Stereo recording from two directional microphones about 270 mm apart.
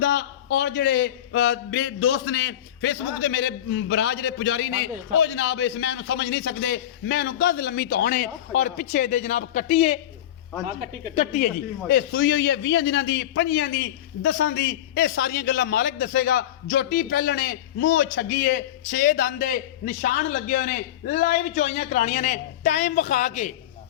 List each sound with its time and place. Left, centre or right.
0.0 s a man's voice: left
11.1 s speech: left
11.9 s a man's voice: left